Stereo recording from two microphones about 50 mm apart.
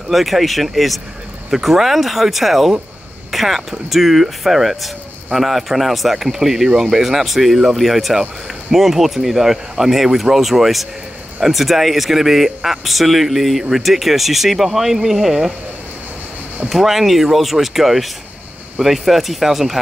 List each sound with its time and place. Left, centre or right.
0.1 s speech: centre
16.6 s speech: centre